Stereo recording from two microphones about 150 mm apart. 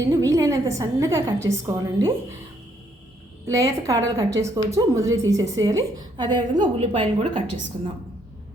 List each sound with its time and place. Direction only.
0.0 s a woman's voice: 20° right (ahead or behind)
3.4 s a woman's voice: 20° right (ahead or behind)